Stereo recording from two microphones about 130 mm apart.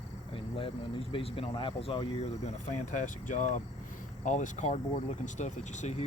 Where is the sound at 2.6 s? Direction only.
70° left (ahead or behind).